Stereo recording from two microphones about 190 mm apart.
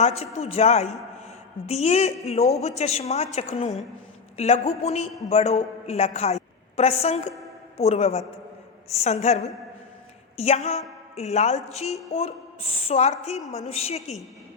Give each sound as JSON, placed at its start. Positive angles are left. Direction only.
{"t": 0.0, "sound": "a woman's voice", "side_deg": 35}